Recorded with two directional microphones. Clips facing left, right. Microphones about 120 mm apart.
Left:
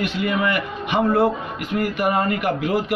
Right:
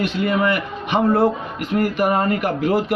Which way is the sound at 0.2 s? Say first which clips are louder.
Right 3 dB; 35° right (ahead or behind).